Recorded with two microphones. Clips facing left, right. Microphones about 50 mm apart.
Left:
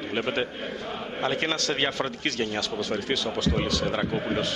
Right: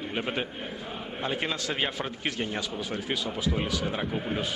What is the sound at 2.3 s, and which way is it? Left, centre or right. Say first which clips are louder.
Speech: left 2 dB; left.